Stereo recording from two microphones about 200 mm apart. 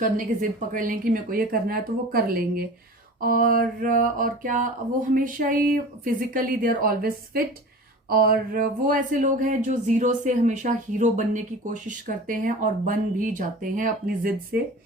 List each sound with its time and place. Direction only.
0.7 s speech: 45° right (ahead or behind)